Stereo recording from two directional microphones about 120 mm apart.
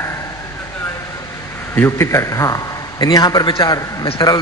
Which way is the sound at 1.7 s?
20° left (ahead or behind).